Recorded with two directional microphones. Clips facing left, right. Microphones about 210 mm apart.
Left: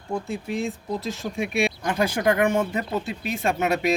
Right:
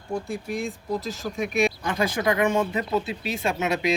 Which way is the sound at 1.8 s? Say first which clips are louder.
Left 2 dB; 50° left (ahead or behind).